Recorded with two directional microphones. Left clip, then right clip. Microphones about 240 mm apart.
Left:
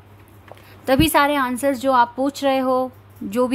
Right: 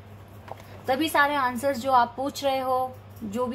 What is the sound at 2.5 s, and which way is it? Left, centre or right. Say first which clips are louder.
Speech: left 5 dB; left.